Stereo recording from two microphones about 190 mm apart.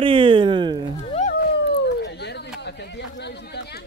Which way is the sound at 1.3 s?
60° left (ahead or behind).